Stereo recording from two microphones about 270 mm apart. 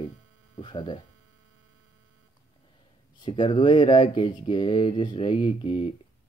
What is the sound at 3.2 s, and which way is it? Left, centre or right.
Speech, centre.